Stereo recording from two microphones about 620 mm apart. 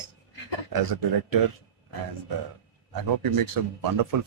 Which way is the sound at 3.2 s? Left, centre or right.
Right.